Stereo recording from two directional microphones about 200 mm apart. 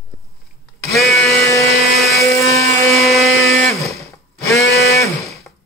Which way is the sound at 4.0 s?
15° left (ahead or behind).